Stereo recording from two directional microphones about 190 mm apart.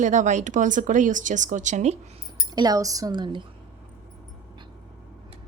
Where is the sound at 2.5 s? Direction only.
20° right (ahead or behind).